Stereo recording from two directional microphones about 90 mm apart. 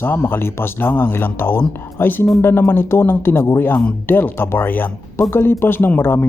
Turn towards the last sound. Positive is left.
turn(degrees=25)  # may be behind; listen again after turning